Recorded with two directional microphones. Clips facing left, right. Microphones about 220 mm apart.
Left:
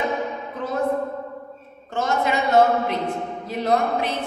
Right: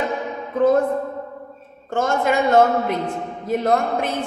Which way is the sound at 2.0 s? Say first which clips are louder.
Right 3 dB; 50° right (ahead or behind).